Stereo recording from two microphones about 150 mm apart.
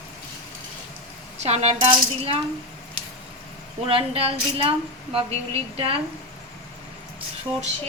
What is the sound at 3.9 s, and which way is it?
A woman's voice, 40° right (ahead or behind).